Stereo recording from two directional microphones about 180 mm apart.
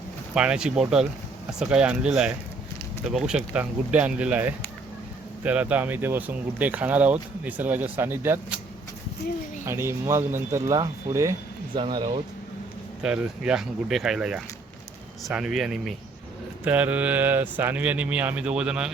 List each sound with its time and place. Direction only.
0.3 s speech: 5° right (ahead or behind)
9.6 s speech: 15° right (ahead or behind)
13.0 s speech: 5° right (ahead or behind)